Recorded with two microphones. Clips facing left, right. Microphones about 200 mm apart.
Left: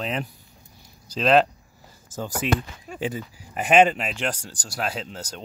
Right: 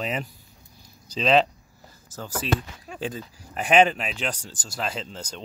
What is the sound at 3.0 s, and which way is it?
Speech, 10° left (ahead or behind).